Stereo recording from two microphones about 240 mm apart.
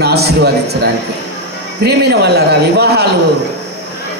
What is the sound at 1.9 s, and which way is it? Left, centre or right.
A man's voice, right.